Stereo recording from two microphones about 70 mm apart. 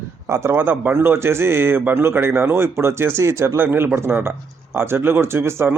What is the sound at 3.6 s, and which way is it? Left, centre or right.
A man's voice, right.